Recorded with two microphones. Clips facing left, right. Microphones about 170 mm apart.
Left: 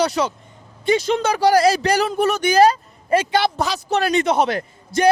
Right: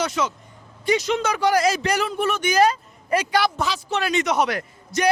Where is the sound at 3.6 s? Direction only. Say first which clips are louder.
Left 4 dB; 40° left (ahead or behind).